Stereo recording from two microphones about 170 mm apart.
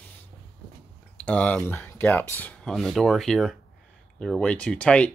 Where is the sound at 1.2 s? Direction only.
10° left (ahead or behind).